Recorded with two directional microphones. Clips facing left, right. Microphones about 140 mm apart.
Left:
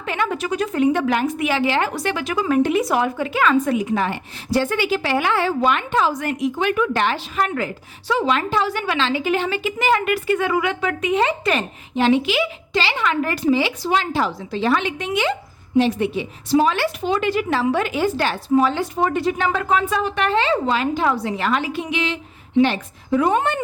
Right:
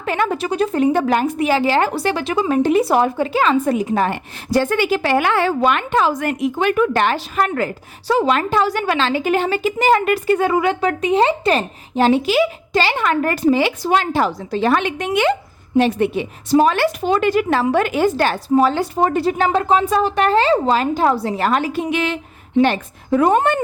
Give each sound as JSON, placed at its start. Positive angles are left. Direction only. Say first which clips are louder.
{"t": 0.0, "sound": "a woman's voice", "louder": "right 3 dB", "side_deg": -40}